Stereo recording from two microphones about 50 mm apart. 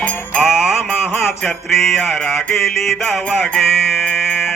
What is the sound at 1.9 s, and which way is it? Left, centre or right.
Music, centre.